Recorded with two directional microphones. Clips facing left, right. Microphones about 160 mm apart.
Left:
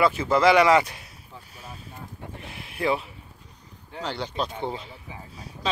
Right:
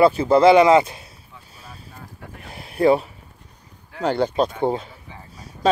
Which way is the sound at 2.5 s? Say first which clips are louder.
Right 9 dB; 40° right (ahead or behind).